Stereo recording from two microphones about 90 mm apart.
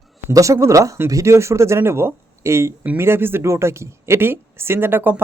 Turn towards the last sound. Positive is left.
turn(degrees=-20)  # may be behind; listen again after turning